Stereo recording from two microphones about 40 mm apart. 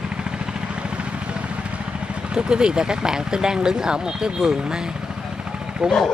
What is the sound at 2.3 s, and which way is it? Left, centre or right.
Speech, centre.